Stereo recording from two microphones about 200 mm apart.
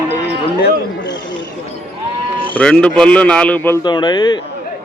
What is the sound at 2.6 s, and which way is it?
Speech, 5° left (ahead or behind).